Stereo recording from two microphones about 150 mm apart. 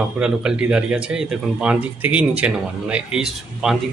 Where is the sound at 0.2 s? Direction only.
5° right (ahead or behind).